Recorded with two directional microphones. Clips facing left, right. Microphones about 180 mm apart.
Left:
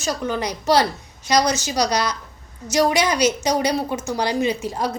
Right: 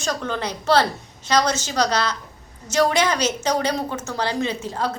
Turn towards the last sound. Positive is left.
turn(degrees=10)  # may be behind; listen again after turning